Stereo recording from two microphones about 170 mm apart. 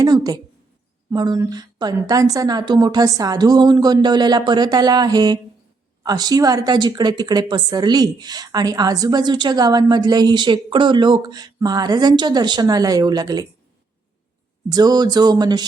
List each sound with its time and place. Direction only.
0.0 s a sound: 20° right (ahead or behind)
1.1 s a woman's voice: 25° right (ahead or behind)
14.7 s a woman's voice: 25° right (ahead or behind)